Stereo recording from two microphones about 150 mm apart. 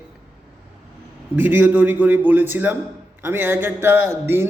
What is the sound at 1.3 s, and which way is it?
Speech, 10° right (ahead or behind).